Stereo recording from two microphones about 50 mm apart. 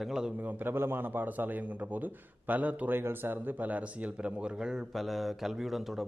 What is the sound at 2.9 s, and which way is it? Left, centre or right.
A man's voice, right.